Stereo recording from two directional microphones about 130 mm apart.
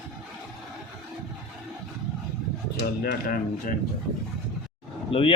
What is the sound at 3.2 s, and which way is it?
Speech, 90° left.